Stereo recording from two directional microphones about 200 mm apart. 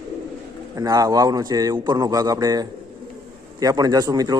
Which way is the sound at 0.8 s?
20° right (ahead or behind).